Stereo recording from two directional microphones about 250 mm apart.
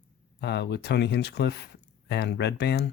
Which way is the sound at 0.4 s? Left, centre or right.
Left.